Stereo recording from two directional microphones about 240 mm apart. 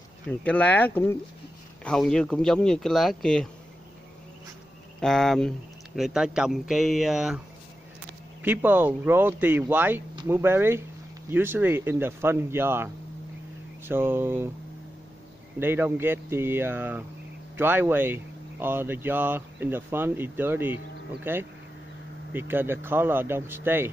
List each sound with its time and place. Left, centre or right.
0.3 s speech: centre
5.0 s speech: centre
15.6 s speech: centre